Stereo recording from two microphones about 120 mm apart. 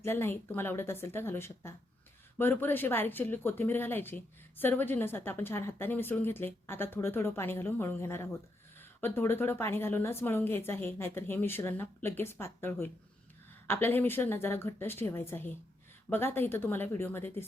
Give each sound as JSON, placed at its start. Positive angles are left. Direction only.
{"t": 0.0, "sound": "a woman's voice", "side_deg": 20}